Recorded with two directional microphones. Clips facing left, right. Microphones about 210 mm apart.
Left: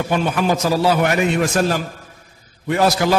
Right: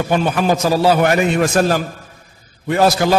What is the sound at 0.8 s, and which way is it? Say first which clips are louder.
A man's voice: right 4 dB; 40° right (ahead or behind).